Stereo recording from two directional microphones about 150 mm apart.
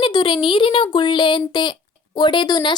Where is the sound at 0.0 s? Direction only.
30° left (ahead or behind).